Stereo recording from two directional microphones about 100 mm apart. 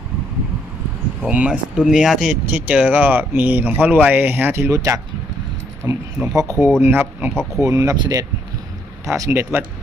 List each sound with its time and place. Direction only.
1.2 s speech: 15° right (ahead or behind)
4.7 s speech: 30° right (ahead or behind)
7.9 s speech: 45° right (ahead or behind)
9.0 s speech: 30° right (ahead or behind)